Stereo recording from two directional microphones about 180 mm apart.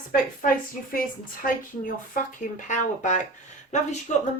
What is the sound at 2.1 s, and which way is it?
A woman's voice, 45° left (ahead or behind).